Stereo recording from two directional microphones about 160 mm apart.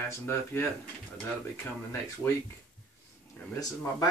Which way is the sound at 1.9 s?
15° left (ahead or behind).